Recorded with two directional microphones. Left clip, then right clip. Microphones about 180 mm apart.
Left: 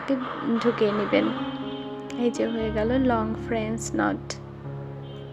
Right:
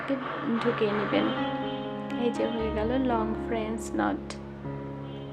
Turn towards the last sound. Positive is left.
turn(degrees=20)  # may be behind; listen again after turning